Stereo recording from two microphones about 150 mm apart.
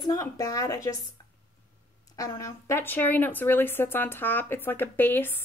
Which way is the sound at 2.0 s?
25° left (ahead or behind).